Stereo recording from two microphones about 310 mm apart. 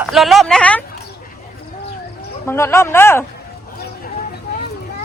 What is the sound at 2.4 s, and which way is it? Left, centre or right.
Speech, centre.